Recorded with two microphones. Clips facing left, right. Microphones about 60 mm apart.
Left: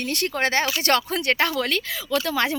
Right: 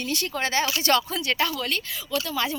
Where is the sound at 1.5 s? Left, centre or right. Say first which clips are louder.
Left 4 dB; left.